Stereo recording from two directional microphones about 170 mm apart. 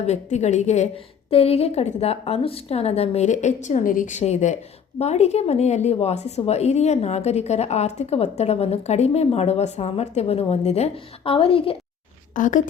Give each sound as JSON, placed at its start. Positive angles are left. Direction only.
{"t": 0.0, "sound": "a woman's voice", "side_deg": 40}
{"t": 12.3, "sound": "a woman's voice", "side_deg": 50}